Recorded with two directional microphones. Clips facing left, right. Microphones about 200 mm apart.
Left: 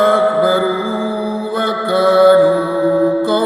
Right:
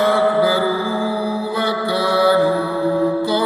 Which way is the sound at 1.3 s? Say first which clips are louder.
Left 2 dB; 50° left (ahead or behind).